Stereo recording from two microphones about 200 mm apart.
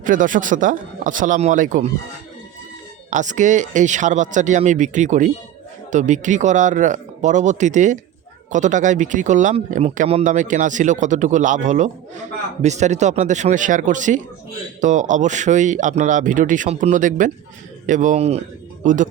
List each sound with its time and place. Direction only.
0.0 s speech: 40° right (ahead or behind)
3.1 s speech: 40° right (ahead or behind)